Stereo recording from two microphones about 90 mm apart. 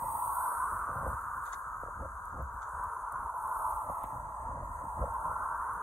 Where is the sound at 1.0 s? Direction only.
20° left (ahead or behind).